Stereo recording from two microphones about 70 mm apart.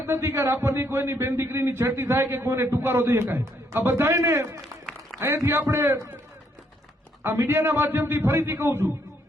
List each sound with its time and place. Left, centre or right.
0.0 s a man's voice: right
7.4 s a man's voice: right